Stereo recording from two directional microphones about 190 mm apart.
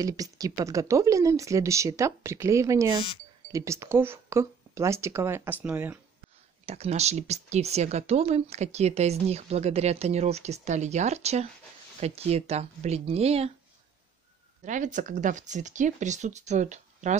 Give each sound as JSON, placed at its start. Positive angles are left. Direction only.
{"t": 0.0, "sound": "speech", "side_deg": -20}
{"t": 6.6, "sound": "speech", "side_deg": -35}
{"t": 14.6, "sound": "speech", "side_deg": -40}